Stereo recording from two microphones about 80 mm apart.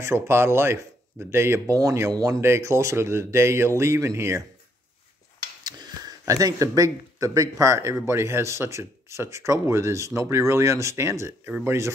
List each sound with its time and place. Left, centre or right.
0.0 s speech: right
1.8 s speech: right
2.4 s speech: right
5.6 s speech: right